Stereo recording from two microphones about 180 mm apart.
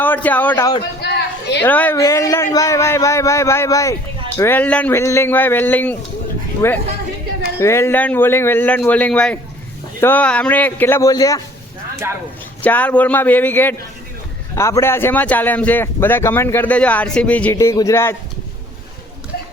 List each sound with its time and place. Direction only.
0.0 s a man's voice: 10° left (ahead or behind)
1.0 s a sound: 70° left (ahead or behind)
1.6 s a man's voice: 10° left (ahead or behind)
12.6 s a man's voice: 10° left (ahead or behind)